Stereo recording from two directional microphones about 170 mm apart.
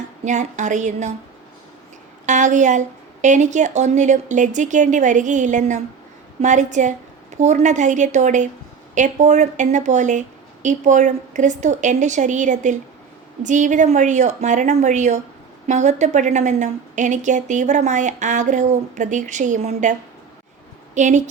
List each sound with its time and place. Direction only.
0.3 s a woman's voice: 45° right (ahead or behind)
2.2 s a woman's voice: 45° right (ahead or behind)